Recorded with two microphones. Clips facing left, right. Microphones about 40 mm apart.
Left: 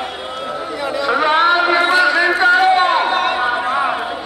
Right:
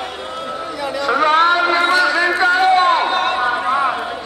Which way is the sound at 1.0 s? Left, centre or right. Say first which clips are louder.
Right 1 dB; centre.